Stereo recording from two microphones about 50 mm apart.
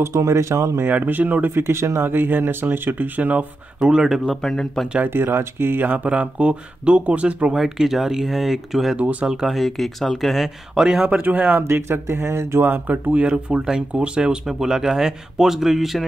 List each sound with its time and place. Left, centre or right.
0.0 s speech: right
0.8 s speech: right
1.5 s speech: right
3.8 s speech: centre
4.3 s speech: centre
5.0 s speech: right
6.0 s speech: right
7.5 s speech: centre
8.9 s speech: right
9.2 s speech: centre
11.2 s speech: right
11.6 s speech: right
12.6 s speech: right
13.5 s speech: centre